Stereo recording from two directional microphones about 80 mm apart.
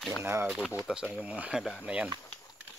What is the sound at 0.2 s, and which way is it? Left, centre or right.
Speech, right.